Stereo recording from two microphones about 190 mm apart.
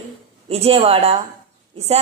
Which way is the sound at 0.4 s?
30° right (ahead or behind).